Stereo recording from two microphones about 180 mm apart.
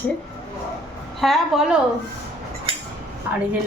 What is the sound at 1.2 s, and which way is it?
Speech, centre (ahead or behind).